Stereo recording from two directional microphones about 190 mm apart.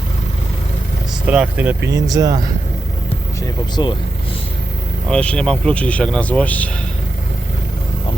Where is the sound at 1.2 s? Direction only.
5° right (ahead or behind).